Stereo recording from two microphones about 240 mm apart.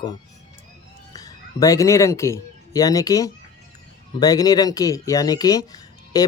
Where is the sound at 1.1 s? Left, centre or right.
Centre.